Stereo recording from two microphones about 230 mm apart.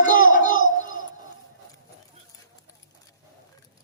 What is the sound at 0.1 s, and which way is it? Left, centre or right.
Crowd, left.